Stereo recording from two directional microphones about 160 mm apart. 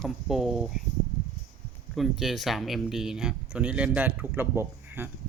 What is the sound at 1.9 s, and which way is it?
Speech, centre (ahead or behind).